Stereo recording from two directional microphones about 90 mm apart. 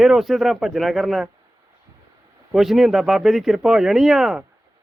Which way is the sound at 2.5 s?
5° right (ahead or behind).